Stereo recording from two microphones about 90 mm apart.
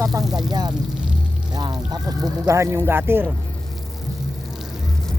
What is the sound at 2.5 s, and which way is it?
Speech, 30° right (ahead or behind).